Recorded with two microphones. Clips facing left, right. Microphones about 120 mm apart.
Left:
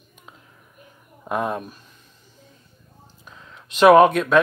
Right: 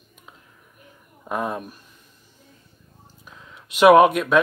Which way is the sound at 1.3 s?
Centre (ahead or behind).